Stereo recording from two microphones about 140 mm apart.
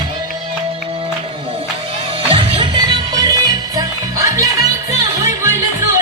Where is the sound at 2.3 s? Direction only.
35° right (ahead or behind).